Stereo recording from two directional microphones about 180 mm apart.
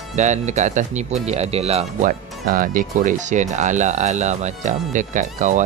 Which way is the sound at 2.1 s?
50° right (ahead or behind).